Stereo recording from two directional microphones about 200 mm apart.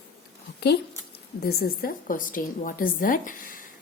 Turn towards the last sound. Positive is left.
turn(degrees=45)  # may be behind; listen again after turning